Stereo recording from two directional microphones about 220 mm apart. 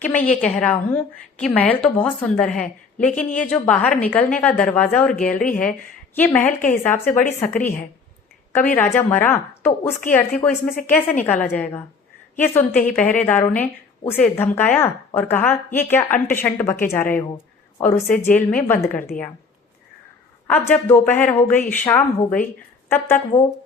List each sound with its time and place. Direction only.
0.0 s a woman's voice: 5° left (ahead or behind)
5.4 s a woman's voice: 40° left (ahead or behind)
6.1 s a woman's voice: 10° left (ahead or behind)
10.8 s a woman's voice: 40° left (ahead or behind)
11.2 s a woman's voice: 10° left (ahead or behind)
18.9 s a woman's voice: 40° left (ahead or behind)
20.5 s a woman's voice: 10° left (ahead or behind)